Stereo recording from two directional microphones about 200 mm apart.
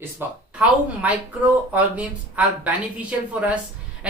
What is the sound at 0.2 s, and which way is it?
A man's voice, 10° right (ahead or behind).